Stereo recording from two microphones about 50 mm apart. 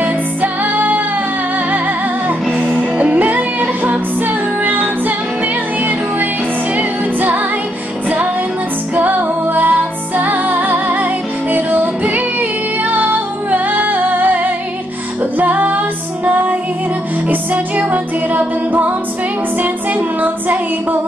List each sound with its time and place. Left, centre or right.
0.0 s music: right
2.7 s music: right
6.8 s music: right
8.9 s music: right
15.3 s female singing: right
17.3 s music: right